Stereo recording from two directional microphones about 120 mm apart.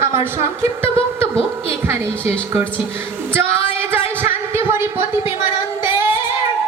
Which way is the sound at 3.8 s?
20° right (ahead or behind).